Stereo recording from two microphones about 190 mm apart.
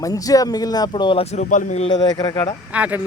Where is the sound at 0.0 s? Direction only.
20° left (ahead or behind); by 1.9 s 40° left (ahead or behind).